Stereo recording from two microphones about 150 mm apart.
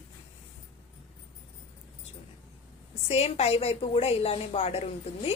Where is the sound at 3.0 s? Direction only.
45° left (ahead or behind).